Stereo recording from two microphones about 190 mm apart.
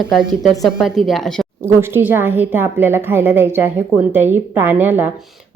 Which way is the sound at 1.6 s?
15° right (ahead or behind).